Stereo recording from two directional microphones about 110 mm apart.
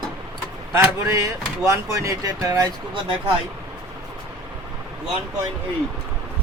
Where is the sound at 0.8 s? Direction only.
25° right (ahead or behind).